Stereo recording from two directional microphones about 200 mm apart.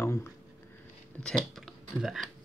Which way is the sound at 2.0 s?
Centre (ahead or behind).